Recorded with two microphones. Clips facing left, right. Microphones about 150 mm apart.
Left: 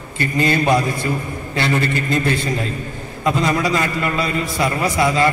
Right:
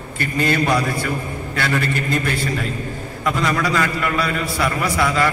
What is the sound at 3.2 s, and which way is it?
A man's voice, 20° left (ahead or behind).